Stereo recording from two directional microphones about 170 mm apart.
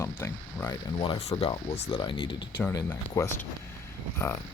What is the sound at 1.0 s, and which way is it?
Speech, 30° left (ahead or behind).